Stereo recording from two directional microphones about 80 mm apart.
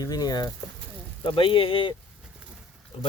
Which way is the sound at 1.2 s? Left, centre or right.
Left.